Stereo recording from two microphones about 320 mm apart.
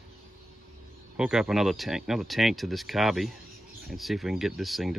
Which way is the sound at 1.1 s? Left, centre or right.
Centre.